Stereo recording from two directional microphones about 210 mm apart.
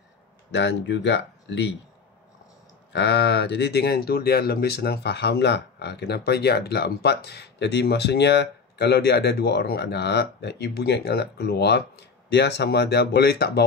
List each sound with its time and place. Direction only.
0.5 s speech: 55° left (ahead or behind)
2.9 s speech: 55° left (ahead or behind)